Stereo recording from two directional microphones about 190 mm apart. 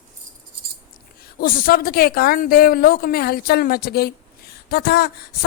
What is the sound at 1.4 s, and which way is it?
A woman's voice, 50° left (ahead or behind).